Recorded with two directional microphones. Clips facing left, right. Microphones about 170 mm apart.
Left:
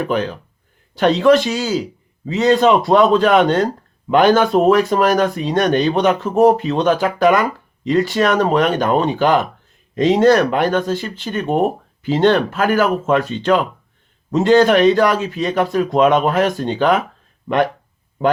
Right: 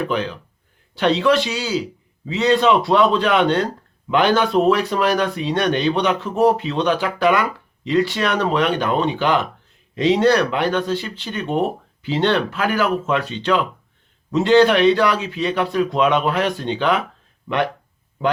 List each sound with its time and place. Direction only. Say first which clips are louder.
0.1 s speech: left 3 dB; 45° left (ahead or behind)